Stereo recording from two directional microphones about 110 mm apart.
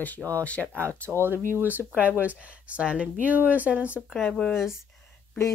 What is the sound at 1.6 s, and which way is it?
Speech, 15° right (ahead or behind).